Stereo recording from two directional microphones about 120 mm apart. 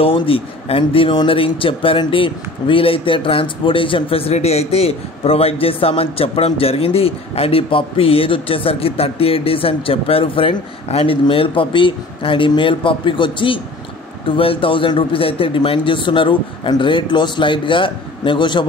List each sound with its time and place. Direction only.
0.0 s speech: 50° left (ahead or behind)